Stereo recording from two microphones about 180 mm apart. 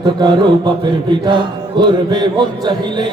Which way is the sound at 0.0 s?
25° right (ahead or behind).